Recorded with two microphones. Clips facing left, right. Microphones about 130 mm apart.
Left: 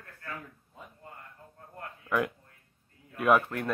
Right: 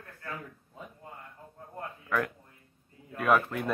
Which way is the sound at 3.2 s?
5° left (ahead or behind).